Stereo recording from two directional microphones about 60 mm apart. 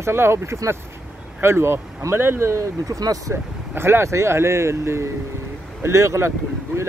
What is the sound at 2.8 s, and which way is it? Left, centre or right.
Speech, right.